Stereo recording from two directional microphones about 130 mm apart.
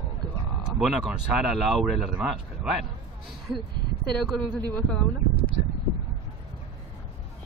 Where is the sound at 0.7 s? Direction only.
5° right (ahead or behind).